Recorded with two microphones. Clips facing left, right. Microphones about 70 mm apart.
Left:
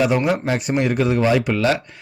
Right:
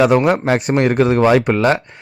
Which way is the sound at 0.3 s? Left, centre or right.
Right.